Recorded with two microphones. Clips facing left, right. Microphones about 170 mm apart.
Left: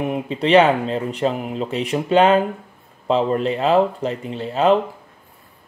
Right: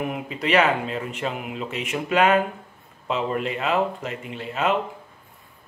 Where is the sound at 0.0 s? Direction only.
25° left (ahead or behind).